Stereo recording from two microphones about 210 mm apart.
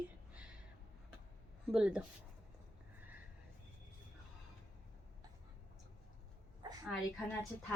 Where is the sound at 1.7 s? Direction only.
5° right (ahead or behind).